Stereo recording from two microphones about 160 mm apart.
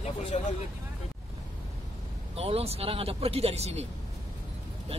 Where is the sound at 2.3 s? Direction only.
40° right (ahead or behind).